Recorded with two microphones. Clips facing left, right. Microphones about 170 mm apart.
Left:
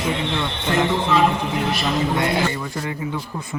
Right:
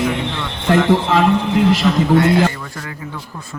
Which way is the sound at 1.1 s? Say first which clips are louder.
Left 1 dB; 90° right.